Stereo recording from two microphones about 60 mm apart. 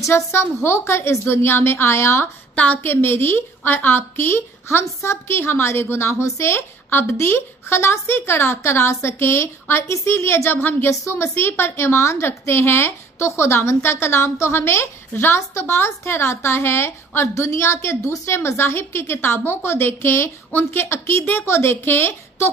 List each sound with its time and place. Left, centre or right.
0.0 s a woman's voice: left
2.5 s a woman's voice: left
2.8 s a woman's voice: left
10.9 s a woman's voice: left